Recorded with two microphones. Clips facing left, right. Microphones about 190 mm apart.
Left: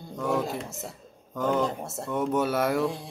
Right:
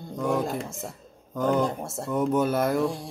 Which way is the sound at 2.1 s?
Centre (ahead or behind).